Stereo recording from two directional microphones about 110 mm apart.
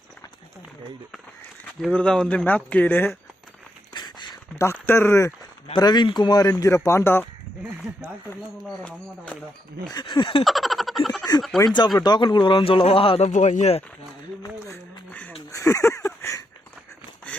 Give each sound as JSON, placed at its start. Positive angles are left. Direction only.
{"t": 1.9, "sound": "speech", "side_deg": 10}
{"t": 3.9, "sound": "a sound", "side_deg": 45}
{"t": 4.5, "sound": "speech", "side_deg": 25}
{"t": 5.7, "sound": "a man's voice", "side_deg": 40}
{"t": 8.6, "sound": "speech", "side_deg": 10}
{"t": 9.9, "sound": "speech", "side_deg": 45}
{"t": 10.4, "sound": "a sound", "side_deg": 0}
{"t": 11.9, "sound": "speech", "side_deg": 40}
{"t": 15.5, "sound": "a sound", "side_deg": 30}